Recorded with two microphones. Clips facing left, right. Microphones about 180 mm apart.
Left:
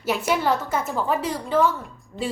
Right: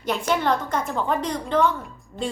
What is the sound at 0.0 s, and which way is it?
A woman's voice, 5° left (ahead or behind).